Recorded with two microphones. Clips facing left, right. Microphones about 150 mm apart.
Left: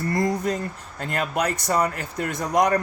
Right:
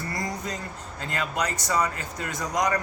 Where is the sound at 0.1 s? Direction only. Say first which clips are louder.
Left 10 dB; 55° left (ahead or behind).